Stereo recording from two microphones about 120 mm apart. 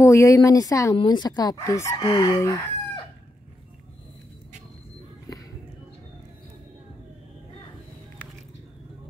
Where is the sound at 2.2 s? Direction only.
25° left (ahead or behind).